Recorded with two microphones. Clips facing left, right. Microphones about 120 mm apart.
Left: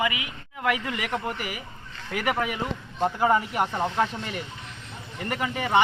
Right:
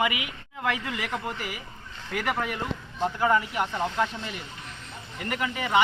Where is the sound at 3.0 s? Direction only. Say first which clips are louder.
Left 2 dB; 30° left (ahead or behind).